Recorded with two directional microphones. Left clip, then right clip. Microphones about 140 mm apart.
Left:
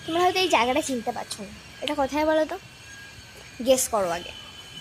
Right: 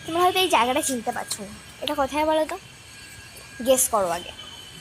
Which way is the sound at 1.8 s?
15° left (ahead or behind).